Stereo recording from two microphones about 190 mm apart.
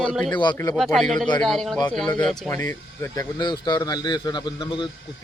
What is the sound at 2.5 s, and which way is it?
Speech, 15° left (ahead or behind).